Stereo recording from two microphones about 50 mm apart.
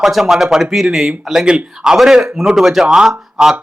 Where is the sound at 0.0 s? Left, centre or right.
Centre.